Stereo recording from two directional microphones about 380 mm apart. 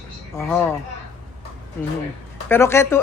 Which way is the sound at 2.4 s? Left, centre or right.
Centre.